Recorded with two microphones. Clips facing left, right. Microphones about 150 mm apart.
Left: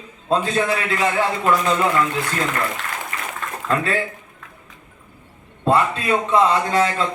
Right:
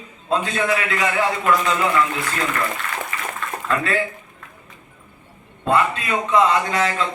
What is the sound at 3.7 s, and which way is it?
Speech, 35° left (ahead or behind).